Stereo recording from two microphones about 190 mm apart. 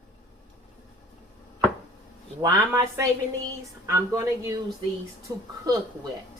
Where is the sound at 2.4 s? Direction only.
15° right (ahead or behind).